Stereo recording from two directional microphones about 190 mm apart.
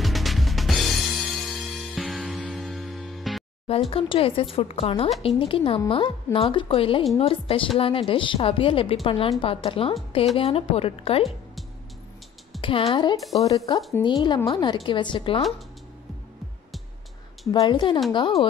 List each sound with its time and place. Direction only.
0.0 s music: centre (ahead or behind)
3.9 s a woman's voice: 30° left (ahead or behind)
12.5 s a woman's voice: 30° left (ahead or behind)
17.5 s a woman's voice: 25° left (ahead or behind)